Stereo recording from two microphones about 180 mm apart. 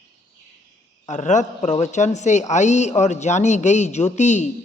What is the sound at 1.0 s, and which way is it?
A man's voice, 45° left (ahead or behind).